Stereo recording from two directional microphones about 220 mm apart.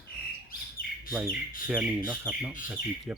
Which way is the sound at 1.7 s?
5° right (ahead or behind).